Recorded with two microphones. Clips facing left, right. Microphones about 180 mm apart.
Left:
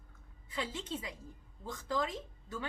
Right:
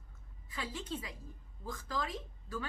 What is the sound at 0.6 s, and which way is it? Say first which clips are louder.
A woman's voice: left 2 dB; 20° left (ahead or behind).